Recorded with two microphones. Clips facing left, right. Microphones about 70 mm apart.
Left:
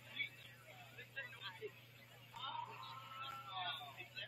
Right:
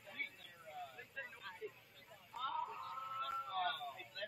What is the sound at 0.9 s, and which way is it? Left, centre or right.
Vehicle, centre.